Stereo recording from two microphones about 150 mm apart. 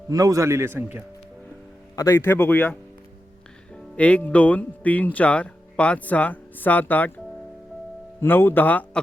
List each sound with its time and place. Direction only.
0.1 s a man's voice: 20° right (ahead or behind)
2.0 s speech: 15° left (ahead or behind)
8.2 s speech: 15° left (ahead or behind)